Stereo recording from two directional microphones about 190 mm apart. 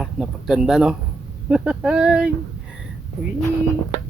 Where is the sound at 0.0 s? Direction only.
5° right (ahead or behind).